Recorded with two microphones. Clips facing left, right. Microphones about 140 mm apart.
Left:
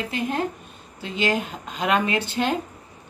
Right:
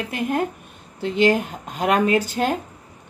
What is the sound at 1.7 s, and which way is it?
Speech, 45° right (ahead or behind).